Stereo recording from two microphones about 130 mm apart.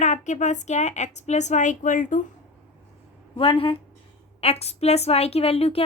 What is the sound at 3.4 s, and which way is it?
A woman's voice, 45° left (ahead or behind).